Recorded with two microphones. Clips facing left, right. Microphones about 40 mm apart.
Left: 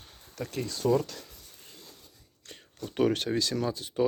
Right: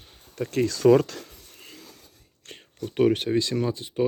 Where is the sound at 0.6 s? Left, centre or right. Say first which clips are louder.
Right 9 dB; right.